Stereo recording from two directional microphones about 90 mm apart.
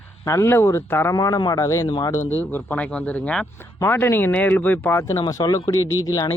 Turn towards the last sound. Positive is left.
turn(degrees=40)  # may be behind; listen again after turning